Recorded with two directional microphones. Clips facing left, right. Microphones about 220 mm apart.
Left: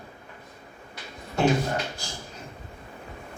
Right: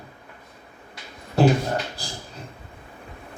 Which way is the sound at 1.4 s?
35° right (ahead or behind).